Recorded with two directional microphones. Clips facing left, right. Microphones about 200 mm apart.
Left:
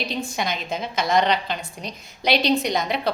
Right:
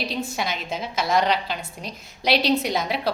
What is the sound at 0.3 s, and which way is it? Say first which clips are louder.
Speech: left 1 dB; 5° right (ahead or behind).